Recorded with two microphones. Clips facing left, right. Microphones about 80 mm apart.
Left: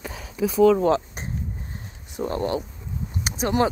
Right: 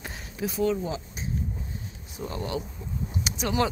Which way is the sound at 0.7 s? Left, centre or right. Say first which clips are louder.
Left 11 dB; left.